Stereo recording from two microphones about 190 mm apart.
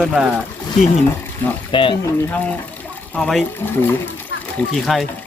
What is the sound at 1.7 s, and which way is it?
Speech, 25° left (ahead or behind).